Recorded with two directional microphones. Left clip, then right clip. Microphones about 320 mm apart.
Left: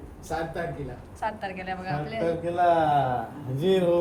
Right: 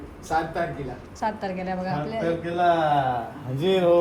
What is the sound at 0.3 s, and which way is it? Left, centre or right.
Speech, centre.